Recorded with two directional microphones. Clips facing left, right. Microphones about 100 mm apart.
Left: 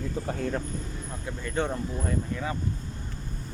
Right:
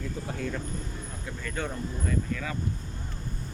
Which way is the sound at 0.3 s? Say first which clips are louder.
Left 4 dB; 40° left (ahead or behind).